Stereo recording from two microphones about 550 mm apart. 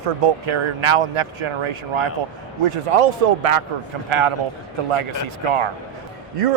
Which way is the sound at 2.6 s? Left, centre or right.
Right.